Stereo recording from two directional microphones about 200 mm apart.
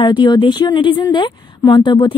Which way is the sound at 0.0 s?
25° left (ahead or behind).